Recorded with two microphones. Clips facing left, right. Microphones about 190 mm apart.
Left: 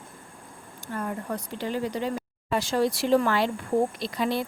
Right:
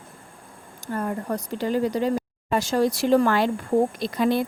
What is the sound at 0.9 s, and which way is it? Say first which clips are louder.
Speech: right 4 dB; 40° right (ahead or behind).